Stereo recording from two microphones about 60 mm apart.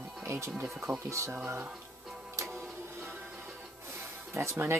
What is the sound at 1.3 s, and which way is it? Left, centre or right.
Speech, right.